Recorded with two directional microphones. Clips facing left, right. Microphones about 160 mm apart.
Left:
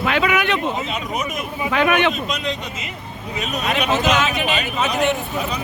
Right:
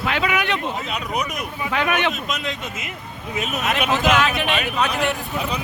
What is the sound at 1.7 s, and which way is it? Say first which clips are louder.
Speech: left 4 dB; 90° left.